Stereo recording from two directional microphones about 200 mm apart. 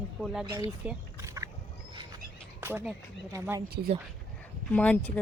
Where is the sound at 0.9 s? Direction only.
15° right (ahead or behind).